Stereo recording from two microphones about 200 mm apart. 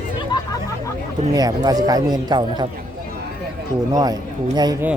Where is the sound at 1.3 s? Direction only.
20° right (ahead or behind).